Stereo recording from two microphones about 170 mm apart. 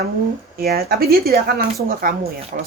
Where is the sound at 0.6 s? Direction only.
65° right (ahead or behind).